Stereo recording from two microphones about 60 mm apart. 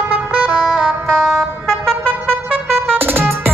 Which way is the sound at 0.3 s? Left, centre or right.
Centre.